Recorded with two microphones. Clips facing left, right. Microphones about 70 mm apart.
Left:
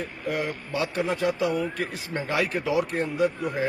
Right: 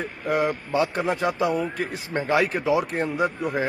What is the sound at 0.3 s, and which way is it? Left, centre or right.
A man's voice, right.